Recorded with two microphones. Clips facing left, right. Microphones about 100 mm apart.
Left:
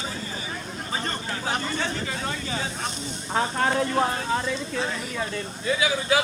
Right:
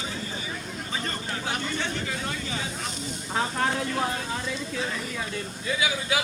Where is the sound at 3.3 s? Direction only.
50° left (ahead or behind).